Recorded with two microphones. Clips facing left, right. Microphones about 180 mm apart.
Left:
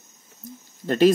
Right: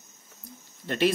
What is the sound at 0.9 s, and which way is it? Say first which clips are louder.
Speech: left 8 dB; 40° left (ahead or behind).